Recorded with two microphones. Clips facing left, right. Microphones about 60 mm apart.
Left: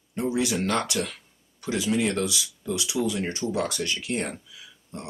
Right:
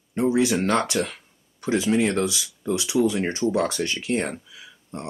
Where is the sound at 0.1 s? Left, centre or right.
Right.